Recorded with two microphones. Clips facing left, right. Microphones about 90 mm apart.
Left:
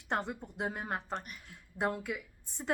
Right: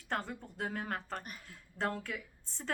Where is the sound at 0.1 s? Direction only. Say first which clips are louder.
Left 3 dB; 20° left (ahead or behind).